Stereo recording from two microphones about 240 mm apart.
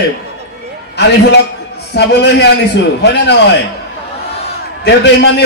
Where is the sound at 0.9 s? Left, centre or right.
Left.